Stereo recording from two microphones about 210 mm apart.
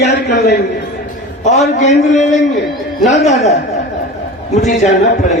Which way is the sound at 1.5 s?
30° left (ahead or behind).